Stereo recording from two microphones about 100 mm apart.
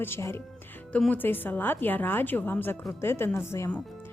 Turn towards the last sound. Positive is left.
turn(degrees=25)  # may be behind; listen again after turning